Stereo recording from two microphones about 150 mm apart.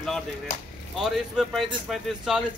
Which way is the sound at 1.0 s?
Centre (ahead or behind).